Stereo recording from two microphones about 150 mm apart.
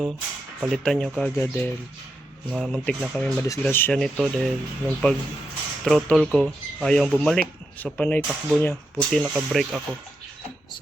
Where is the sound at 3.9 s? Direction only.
Centre (ahead or behind).